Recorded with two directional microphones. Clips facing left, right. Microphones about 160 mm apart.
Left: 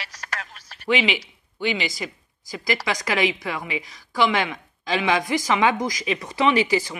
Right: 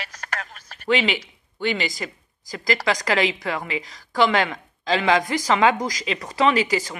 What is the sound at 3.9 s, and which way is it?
Speech, 40° right (ahead or behind).